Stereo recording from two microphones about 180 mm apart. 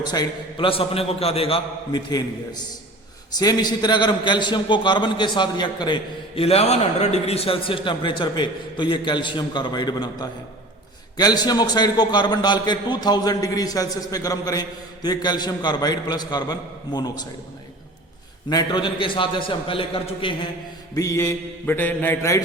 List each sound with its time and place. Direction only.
0.0 s a man's voice: 25° left (ahead or behind)
18.4 s a man's voice: 25° left (ahead or behind)
20.9 s mantra: 20° left (ahead or behind)